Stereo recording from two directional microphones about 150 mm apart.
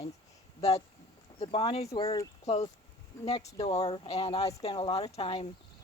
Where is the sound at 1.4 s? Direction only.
35° left (ahead or behind).